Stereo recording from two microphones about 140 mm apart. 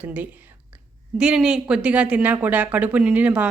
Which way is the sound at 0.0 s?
10° right (ahead or behind).